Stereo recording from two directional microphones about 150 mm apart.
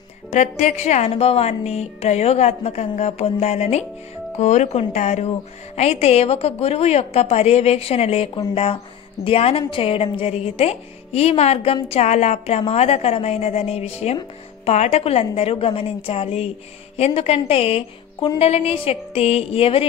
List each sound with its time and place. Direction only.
0.3 s a woman's voice: 50° left (ahead or behind)